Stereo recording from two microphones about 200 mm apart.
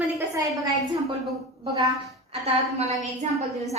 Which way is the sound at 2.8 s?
35° right (ahead or behind).